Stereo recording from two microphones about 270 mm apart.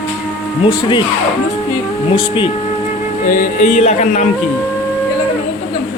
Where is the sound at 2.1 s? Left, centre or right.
Centre.